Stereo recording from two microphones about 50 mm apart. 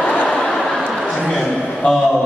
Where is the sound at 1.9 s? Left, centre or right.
Centre.